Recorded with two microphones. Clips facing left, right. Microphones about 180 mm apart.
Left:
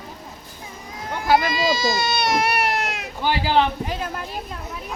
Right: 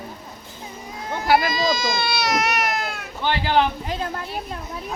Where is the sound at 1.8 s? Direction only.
40° left (ahead or behind).